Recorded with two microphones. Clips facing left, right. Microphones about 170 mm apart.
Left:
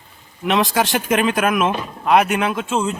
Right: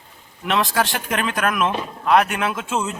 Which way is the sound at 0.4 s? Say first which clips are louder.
Left 3 dB; centre (ahead or behind).